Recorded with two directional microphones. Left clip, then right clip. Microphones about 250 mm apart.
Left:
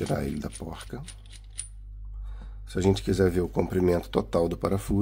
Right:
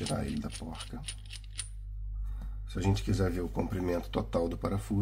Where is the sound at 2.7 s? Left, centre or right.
Left.